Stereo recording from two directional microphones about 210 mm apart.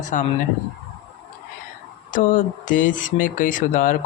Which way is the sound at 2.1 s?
40° left (ahead or behind).